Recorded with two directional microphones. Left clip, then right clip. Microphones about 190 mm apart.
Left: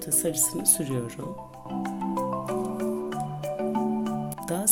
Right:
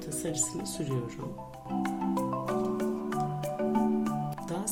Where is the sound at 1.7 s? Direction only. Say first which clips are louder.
Left 1 dB; centre (ahead or behind).